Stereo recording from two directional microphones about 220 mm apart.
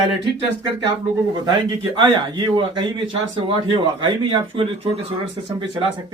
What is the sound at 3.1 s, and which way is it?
Speech, 20° right (ahead or behind).